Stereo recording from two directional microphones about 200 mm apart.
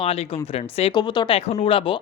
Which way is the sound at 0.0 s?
30° left (ahead or behind).